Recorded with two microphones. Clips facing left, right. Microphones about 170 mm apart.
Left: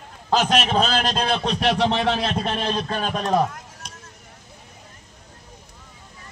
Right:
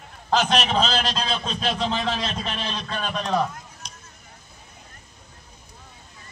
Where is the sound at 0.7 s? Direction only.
50° left (ahead or behind).